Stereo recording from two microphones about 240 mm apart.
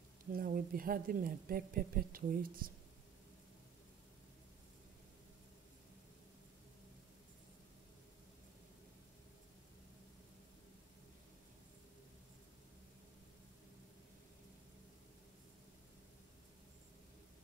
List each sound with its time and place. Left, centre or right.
0.3 s a woman's voice: right